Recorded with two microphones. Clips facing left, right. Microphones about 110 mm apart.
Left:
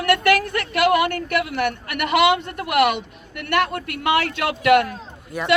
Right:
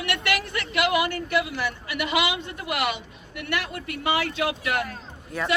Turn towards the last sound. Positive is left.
turn(degrees=10)  # may be behind; listen again after turning